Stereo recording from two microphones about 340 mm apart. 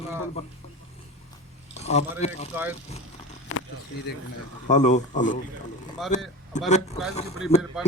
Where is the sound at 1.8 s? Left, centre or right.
Centre.